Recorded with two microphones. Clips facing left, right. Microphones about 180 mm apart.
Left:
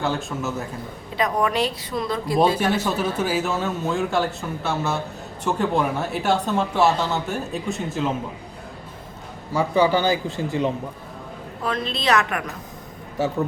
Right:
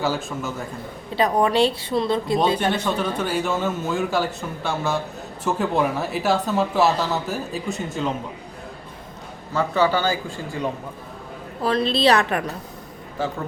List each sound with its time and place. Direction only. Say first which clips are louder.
0.0 s speech: even; centre (ahead or behind)
1.1 s a woman's voice: right 3 dB; 30° right (ahead or behind)
2.7 s speech: left 1 dB; 5° left (ahead or behind)
9.5 s a man's voice: left 1 dB; 15° left (ahead or behind)
11.6 s a woman's voice: right 6 dB; 35° right (ahead or behind)